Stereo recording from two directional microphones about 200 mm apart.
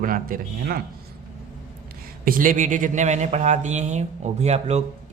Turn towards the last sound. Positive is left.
turn(degrees=-35)  # may be behind; listen again after turning